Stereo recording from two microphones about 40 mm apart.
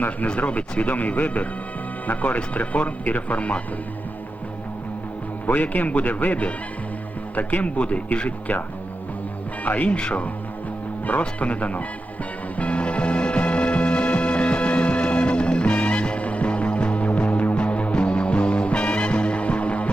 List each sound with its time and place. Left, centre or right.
0.3 s speech: left
5.6 s speech: left
9.6 s speech: left
9.9 s speech: left
12.5 s music: left